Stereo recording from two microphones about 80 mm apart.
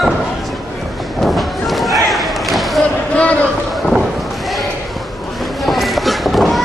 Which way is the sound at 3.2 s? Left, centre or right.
Centre.